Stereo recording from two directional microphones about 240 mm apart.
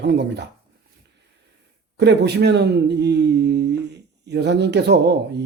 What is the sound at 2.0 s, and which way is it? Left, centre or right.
Speech, right.